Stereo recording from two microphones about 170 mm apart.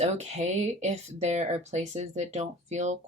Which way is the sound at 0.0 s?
40° right (ahead or behind).